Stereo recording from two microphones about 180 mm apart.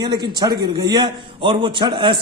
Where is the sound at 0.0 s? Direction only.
25° right (ahead or behind).